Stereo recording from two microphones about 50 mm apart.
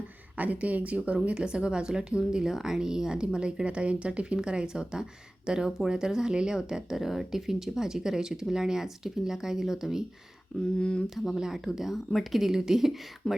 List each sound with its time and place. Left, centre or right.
0.3 s speech: right; by 10.0 s centre
10.8 s speech: centre
11.3 s a woman's voice: centre
13.2 s speech: centre